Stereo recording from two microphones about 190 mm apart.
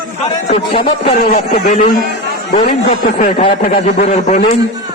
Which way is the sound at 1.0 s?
50° left (ahead or behind).